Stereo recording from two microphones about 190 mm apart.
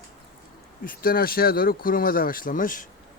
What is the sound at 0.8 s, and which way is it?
Speech, 50° left (ahead or behind).